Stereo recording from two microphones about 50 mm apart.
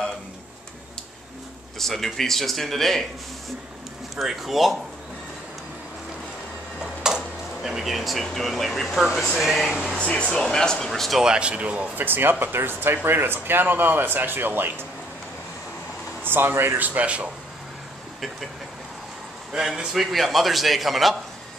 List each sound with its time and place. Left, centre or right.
1.8 s speech: centre
4.2 s speech: centre
6.8 s speech: centre
9.9 s speech: centre
10.9 s speech: centre
11.2 s speech: right
12.0 s speech: right
16.3 s speech: right
16.8 s speech: right
19.5 s speech: centre